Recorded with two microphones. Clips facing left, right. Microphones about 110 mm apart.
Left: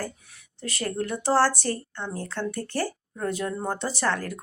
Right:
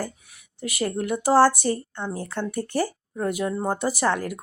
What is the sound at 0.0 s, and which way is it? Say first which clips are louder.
Speech: right 2 dB; 10° right (ahead or behind).